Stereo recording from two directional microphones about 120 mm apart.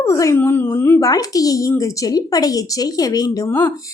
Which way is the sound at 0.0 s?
25° left (ahead or behind).